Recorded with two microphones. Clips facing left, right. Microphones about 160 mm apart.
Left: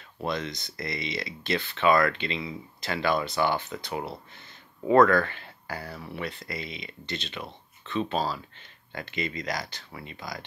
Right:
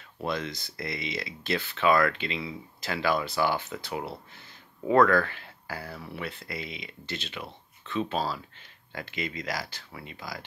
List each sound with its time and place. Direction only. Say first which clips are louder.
0.2 s speech: left 1 dB; 5° right (ahead or behind)